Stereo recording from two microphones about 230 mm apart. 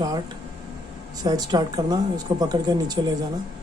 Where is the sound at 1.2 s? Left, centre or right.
Centre.